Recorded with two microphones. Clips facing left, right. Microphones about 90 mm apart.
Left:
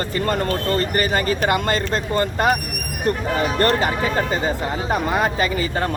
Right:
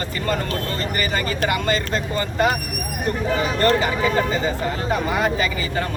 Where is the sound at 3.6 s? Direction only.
50° left (ahead or behind).